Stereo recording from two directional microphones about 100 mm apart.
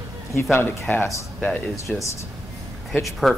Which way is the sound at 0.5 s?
20° left (ahead or behind).